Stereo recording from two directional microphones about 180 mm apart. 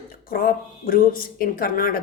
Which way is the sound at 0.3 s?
55° left (ahead or behind).